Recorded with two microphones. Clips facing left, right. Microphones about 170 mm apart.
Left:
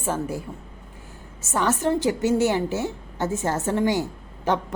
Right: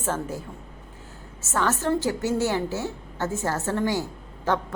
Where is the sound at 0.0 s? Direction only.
10° left (ahead or behind).